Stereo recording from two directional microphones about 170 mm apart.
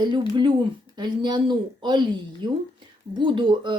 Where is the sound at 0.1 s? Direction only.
25° right (ahead or behind).